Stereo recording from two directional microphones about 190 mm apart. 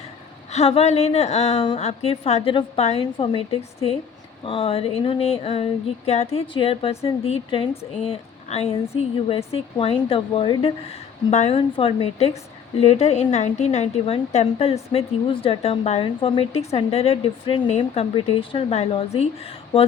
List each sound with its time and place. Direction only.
0.5 s a woman's voice: 35° left (ahead or behind)